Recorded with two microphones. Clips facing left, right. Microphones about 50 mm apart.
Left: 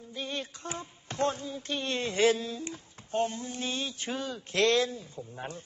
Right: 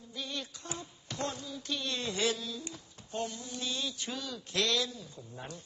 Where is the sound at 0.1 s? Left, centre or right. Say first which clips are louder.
Left 4 dB; left.